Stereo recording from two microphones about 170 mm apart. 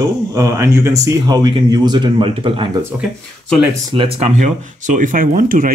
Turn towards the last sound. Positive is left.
turn(degrees=-55)  # may be behind; listen again after turning